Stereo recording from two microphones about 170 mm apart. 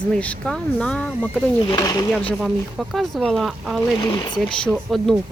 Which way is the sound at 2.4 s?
Centre (ahead or behind).